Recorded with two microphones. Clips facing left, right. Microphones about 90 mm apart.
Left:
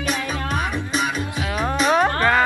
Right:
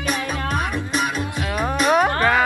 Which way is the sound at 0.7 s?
Centre (ahead or behind).